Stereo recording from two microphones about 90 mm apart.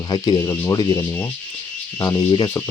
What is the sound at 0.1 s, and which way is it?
Speech, 40° left (ahead or behind).